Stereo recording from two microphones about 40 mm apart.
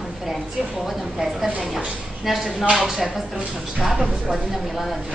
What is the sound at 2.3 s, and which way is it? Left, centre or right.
A woman's voice, centre.